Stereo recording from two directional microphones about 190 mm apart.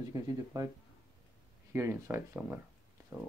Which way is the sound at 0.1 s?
15° right (ahead or behind).